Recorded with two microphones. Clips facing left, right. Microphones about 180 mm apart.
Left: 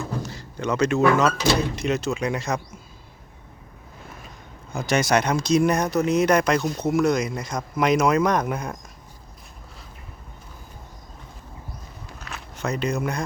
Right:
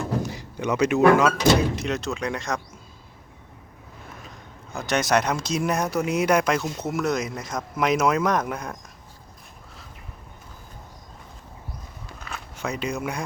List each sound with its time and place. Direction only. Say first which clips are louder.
0.2 s speech: right 2 dB; 15° right (ahead or behind)
1.7 s speech: left 3 dB; centre (ahead or behind)
4.7 s speech: left 1 dB; centre (ahead or behind)
12.3 s speech: left 2 dB; 5° right (ahead or behind)